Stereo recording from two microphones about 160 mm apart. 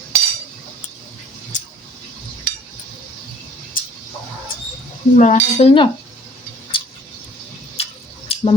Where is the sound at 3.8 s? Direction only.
60° left (ahead or behind).